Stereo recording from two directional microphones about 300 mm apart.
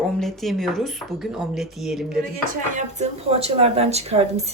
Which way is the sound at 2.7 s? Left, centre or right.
Right.